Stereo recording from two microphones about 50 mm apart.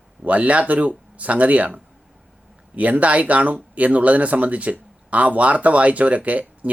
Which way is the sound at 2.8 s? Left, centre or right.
Right.